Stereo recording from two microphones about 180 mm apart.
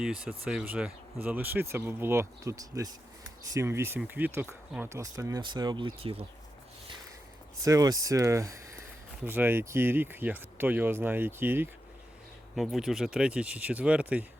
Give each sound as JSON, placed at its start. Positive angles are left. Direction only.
{"t": 0.0, "sound": "speech", "side_deg": -5}
{"t": 7.6, "sound": "speech", "side_deg": -20}
{"t": 12.5, "sound": "speech", "side_deg": 0}